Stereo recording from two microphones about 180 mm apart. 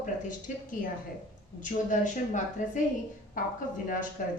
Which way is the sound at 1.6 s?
45° left (ahead or behind).